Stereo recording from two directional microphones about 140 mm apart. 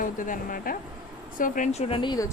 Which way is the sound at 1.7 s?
50° left (ahead or behind).